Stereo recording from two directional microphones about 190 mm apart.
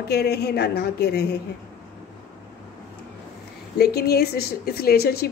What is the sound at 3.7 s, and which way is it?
A woman's voice, 55° left (ahead or behind).